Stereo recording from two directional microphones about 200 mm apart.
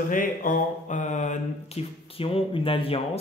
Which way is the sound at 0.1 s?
40° left (ahead or behind).